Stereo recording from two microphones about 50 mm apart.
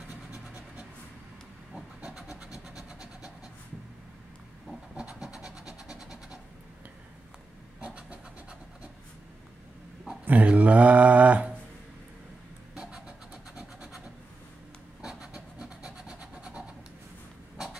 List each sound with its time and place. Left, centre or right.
2.1 s vehicle: centre
4.9 s train: centre
7.8 s vehicle: right
10.2 s speech: right
12.7 s vehicle: centre
15.0 s train: centre